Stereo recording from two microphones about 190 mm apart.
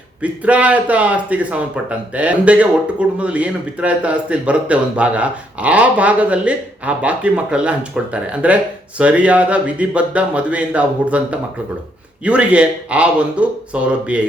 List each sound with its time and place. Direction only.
0.2 s a man's voice: 5° right (ahead or behind)